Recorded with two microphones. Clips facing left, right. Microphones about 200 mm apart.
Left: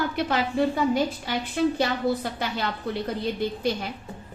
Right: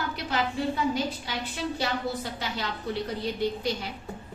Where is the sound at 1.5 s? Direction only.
55° left (ahead or behind).